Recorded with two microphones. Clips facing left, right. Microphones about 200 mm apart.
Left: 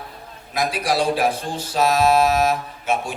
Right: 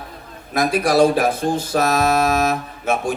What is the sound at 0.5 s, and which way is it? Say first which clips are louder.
Speech: right 5 dB; 50° right (ahead or behind).